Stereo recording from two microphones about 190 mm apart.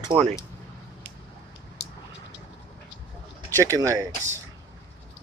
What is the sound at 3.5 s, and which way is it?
Speech, 15° right (ahead or behind).